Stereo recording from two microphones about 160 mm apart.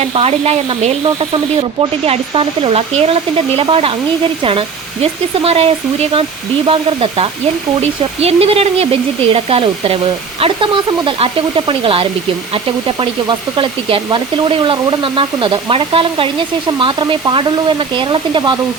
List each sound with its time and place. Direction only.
0.0 s speech: 40° right (ahead or behind)
5.4 s speech: 40° right (ahead or behind)